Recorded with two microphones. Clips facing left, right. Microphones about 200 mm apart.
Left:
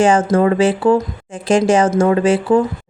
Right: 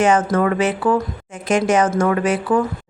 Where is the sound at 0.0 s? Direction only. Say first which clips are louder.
Left 3 dB; 30° left (ahead or behind).